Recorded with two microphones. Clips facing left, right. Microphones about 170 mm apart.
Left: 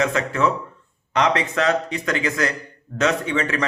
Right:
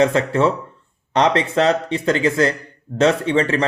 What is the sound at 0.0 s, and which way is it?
Speech, 30° right (ahead or behind).